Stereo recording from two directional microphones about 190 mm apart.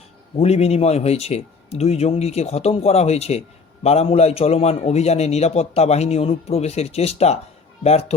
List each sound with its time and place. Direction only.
0.3 s a man's voice: 35° left (ahead or behind)